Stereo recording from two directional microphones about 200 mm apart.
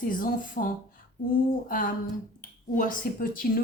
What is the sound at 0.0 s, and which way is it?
Speech, 45° left (ahead or behind).